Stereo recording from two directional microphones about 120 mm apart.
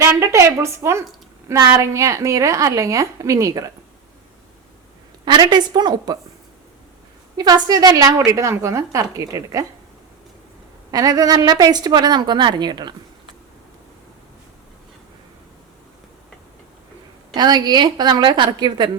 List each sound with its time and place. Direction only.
0.0 s a woman's voice: 25° right (ahead or behind)
5.2 s a woman's voice: 35° right (ahead or behind)
7.3 s a woman's voice: 35° right (ahead or behind)
10.9 s a woman's voice: 30° right (ahead or behind)
17.3 s a woman's voice: 35° right (ahead or behind)